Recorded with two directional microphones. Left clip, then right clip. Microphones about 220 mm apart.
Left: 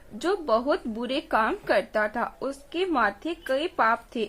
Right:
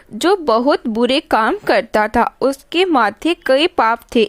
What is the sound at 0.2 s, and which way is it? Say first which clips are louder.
Speech: right 11 dB; 50° right (ahead or behind).